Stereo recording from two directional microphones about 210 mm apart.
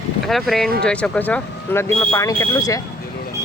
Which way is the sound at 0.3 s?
Centre (ahead or behind).